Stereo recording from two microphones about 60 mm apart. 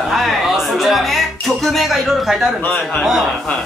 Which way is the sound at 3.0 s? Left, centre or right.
Centre.